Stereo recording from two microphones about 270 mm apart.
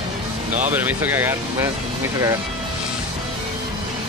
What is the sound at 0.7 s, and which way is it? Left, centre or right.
Speech, centre.